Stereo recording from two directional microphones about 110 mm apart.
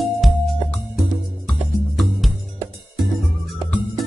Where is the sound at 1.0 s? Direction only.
Centre (ahead or behind).